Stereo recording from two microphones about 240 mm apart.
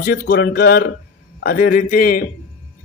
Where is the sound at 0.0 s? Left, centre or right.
Left.